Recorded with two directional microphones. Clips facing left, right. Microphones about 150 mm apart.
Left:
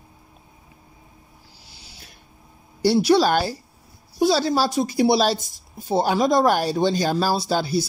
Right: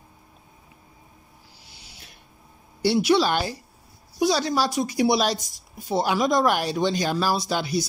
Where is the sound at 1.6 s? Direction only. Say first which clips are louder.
Left 3 dB; 35° left (ahead or behind).